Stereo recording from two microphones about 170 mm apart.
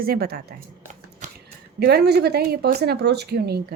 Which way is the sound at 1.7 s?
70° right (ahead or behind).